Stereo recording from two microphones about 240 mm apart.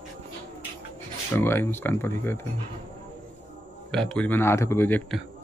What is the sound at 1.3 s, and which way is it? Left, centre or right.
Speech, centre.